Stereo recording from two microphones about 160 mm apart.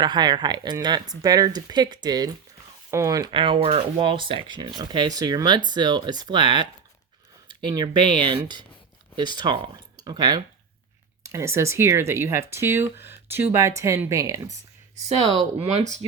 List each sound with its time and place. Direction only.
0.0 s speech: 25° right (ahead or behind)
15.6 s speech: 45° right (ahead or behind)